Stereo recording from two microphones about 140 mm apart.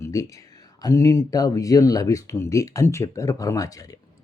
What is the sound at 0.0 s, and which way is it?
Speech, 25° left (ahead or behind).